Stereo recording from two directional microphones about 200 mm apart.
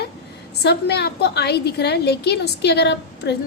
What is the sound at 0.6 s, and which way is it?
A woman's voice, 55° left (ahead or behind).